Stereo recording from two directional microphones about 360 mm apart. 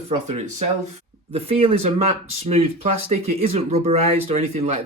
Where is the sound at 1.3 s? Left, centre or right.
Centre.